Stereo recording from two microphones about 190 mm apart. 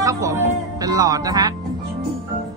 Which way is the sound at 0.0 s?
15° right (ahead or behind).